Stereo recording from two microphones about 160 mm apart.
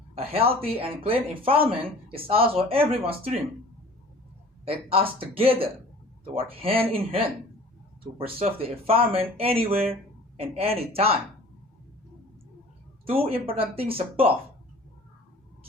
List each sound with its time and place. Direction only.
0.1 s speech: 40° right (ahead or behind)
4.6 s speech: 35° right (ahead or behind)
13.1 s speech: 35° right (ahead or behind)